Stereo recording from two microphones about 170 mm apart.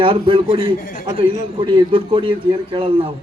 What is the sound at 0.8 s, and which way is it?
Speech, 55° left (ahead or behind).